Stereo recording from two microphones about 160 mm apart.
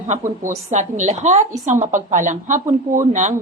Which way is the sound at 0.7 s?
50° right (ahead or behind).